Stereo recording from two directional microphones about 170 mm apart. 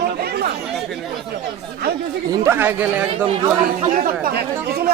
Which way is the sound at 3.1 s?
35° right (ahead or behind).